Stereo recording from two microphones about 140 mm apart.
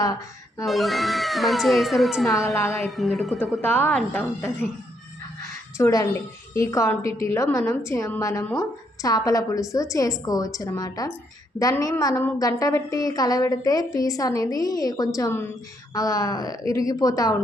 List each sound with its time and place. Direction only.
0.6 s speech: centre (ahead or behind)
2.6 s a woman's voice: 20° left (ahead or behind)
2.8 s speech: centre (ahead or behind)
3.6 s speech: 15° left (ahead or behind)
5.7 s a woman's voice: 25° left (ahead or behind)